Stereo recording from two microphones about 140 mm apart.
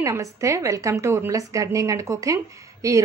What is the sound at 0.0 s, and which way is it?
A woman's voice, 20° right (ahead or behind).